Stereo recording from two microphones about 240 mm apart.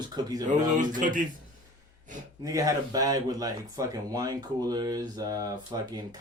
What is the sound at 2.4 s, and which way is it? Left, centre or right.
Speech, centre.